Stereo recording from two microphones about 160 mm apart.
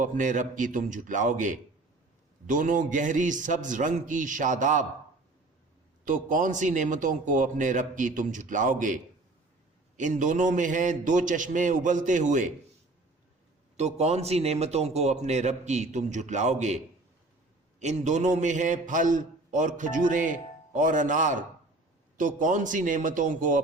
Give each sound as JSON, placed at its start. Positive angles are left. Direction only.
{"t": 0.0, "sound": "a man's voice", "side_deg": -50}
{"t": 6.1, "sound": "a man's voice", "side_deg": -55}
{"t": 10.0, "sound": "a man's voice", "side_deg": -50}
{"t": 13.7, "sound": "a man's voice", "side_deg": -45}